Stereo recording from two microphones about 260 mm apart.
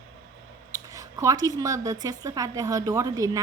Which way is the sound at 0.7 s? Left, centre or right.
Centre.